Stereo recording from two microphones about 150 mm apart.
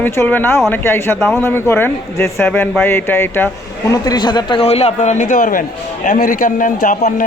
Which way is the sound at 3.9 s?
25° left (ahead or behind).